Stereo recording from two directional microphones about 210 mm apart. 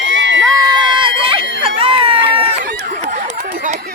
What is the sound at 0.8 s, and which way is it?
Run, 25° right (ahead or behind).